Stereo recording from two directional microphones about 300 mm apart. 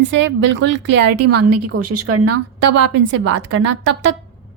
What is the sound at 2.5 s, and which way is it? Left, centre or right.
A woman's voice, right.